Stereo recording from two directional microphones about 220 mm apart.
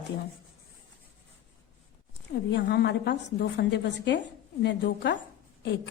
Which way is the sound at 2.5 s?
50° left (ahead or behind).